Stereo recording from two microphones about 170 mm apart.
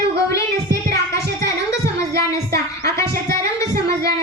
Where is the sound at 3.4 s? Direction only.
70° right (ahead or behind).